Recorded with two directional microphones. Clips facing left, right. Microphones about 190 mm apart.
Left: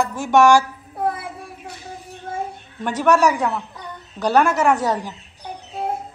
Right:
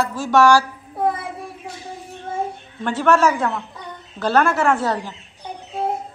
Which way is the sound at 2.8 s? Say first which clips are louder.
Even; 15° left (ahead or behind).